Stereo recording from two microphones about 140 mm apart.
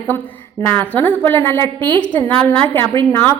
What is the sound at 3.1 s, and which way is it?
Speech, 15° left (ahead or behind).